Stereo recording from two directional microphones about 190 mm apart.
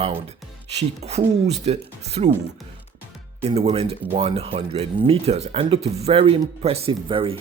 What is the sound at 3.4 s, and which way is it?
Speech, 30° right (ahead or behind).